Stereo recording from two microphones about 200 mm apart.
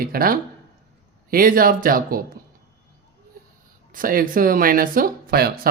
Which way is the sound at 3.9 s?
45° right (ahead or behind).